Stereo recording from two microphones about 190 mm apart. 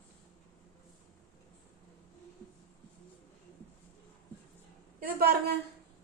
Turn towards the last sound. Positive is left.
turn(degrees=-50)  # may be behind; listen again after turning